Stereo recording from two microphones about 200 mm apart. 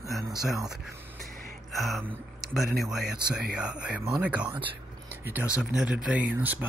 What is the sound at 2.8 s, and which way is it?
Speech, centre (ahead or behind).